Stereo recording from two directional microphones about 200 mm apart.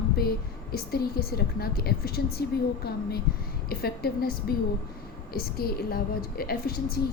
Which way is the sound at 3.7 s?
50° left (ahead or behind).